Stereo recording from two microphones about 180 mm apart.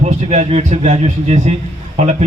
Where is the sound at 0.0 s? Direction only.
40° right (ahead or behind).